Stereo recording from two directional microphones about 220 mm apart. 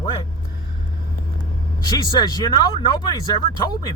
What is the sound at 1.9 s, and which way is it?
Speech, 20° left (ahead or behind).